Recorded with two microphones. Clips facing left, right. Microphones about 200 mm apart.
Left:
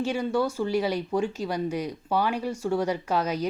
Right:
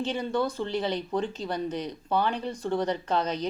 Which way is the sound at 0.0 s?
10° left (ahead or behind).